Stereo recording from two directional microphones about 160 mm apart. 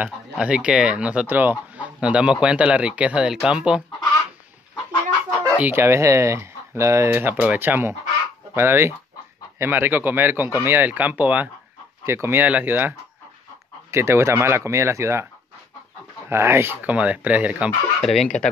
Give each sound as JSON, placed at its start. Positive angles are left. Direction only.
{"t": 0.0, "sound": "speech", "side_deg": -5}
{"t": 5.6, "sound": "speech", "side_deg": -15}
{"t": 16.3, "sound": "speech", "side_deg": -15}